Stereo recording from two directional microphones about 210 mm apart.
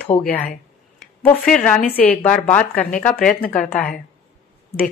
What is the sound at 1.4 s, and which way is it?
A woman's voice, 5° left (ahead or behind).